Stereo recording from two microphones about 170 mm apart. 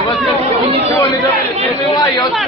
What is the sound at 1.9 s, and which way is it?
Speech, 25° left (ahead or behind).